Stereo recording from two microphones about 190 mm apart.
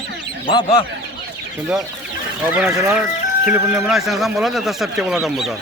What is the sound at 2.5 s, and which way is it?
Speech, 10° right (ahead or behind).